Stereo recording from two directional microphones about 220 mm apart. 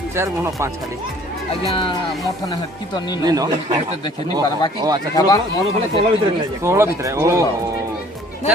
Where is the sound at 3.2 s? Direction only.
15° right (ahead or behind).